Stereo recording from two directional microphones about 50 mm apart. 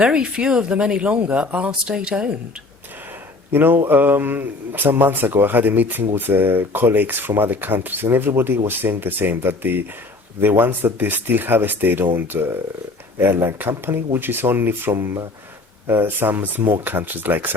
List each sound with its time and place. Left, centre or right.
0.0 s speech: centre
3.5 s a man's voice: right